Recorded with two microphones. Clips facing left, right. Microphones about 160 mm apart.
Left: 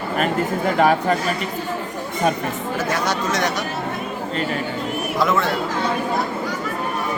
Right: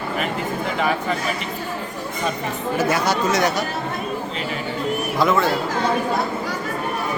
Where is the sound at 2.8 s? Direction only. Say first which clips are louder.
Right 2 dB; 5° right (ahead or behind).